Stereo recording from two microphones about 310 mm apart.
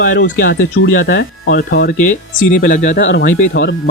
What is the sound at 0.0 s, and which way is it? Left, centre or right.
Speech, left.